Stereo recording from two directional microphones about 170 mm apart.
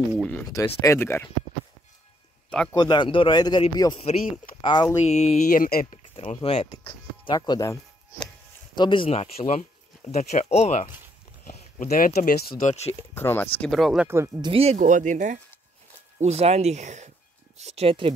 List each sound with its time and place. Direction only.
0.2 s speech: 10° left (ahead or behind)
2.7 s a man's voice: 25° left (ahead or behind)
5.0 s speech: 40° left (ahead or behind); by 5.9 s 55° left (ahead or behind)
6.1 s speech: 35° left (ahead or behind); by 12.4 s 60° left (ahead or behind)
12.6 s speech: 40° left (ahead or behind)
13.1 s speech: 15° left (ahead or behind)
14.0 s speech: 15° right (ahead or behind)
14.4 s speech: 35° right (ahead or behind)